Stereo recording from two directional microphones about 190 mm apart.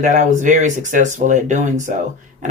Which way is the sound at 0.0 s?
40° right (ahead or behind).